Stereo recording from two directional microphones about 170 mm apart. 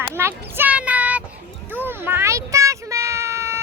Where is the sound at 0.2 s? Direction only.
15° right (ahead or behind).